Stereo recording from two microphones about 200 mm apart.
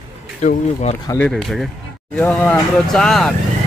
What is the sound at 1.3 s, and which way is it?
Speech, centre (ahead or behind).